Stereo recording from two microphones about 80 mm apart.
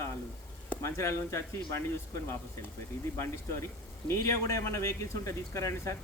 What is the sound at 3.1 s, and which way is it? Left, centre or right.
Speech, left.